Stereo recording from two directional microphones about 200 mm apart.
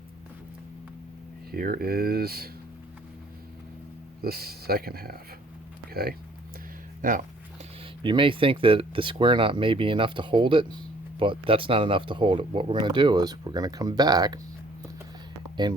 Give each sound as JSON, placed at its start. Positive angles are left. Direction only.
{"t": 1.5, "sound": "speech", "side_deg": -50}
{"t": 4.2, "sound": "speech", "side_deg": -50}
{"t": 8.0, "sound": "speech", "side_deg": -25}
{"t": 15.6, "sound": "speech", "side_deg": -20}